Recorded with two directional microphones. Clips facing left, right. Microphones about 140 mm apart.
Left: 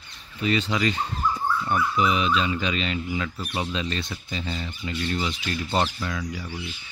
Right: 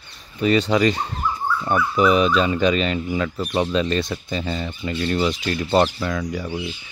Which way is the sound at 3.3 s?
90° right.